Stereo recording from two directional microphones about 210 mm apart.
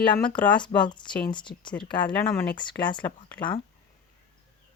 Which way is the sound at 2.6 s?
20° left (ahead or behind).